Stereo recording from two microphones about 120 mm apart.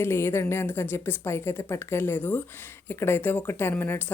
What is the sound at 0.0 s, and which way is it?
A woman's voice, 20° left (ahead or behind).